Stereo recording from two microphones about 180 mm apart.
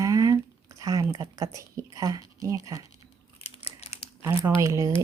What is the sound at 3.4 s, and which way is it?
Crumpling, 35° left (ahead or behind).